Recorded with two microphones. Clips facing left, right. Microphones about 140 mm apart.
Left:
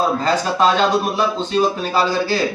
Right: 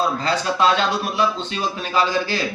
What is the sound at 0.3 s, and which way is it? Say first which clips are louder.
Speech: left 1 dB; 45° left (ahead or behind).